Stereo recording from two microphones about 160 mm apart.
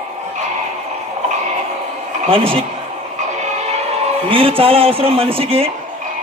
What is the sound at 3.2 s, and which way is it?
Music, 45° right (ahead or behind).